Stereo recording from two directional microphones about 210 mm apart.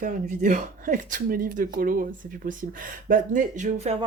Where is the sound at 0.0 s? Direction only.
40° right (ahead or behind).